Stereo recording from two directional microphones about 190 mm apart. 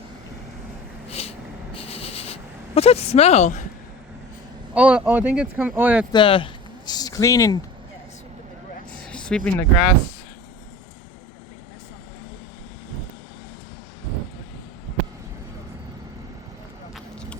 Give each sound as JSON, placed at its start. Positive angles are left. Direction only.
{"t": 1.1, "sound": "a sound", "side_deg": 30}
{"t": 4.7, "sound": "speech", "side_deg": -5}
{"t": 6.1, "sound": "speech", "side_deg": 25}
{"t": 9.0, "sound": "speech", "side_deg": 5}
{"t": 16.9, "sound": "vehicle", "side_deg": 5}